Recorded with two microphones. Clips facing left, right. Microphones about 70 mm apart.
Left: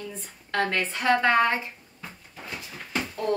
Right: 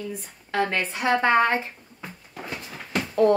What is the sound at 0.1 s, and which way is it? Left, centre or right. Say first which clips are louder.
A woman's voice: right 2 dB; centre.